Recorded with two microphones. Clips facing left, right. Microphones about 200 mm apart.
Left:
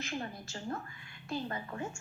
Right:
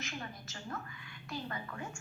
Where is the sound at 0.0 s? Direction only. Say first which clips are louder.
Left 5 dB; 30° left (ahead or behind).